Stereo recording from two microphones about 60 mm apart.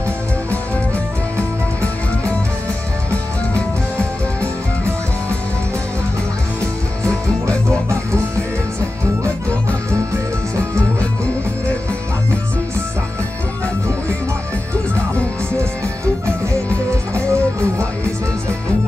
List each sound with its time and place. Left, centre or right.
16.9 s music: right